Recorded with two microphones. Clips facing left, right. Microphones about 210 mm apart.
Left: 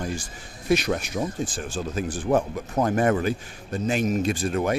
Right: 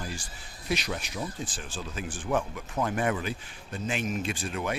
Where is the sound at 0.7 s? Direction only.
50° left (ahead or behind).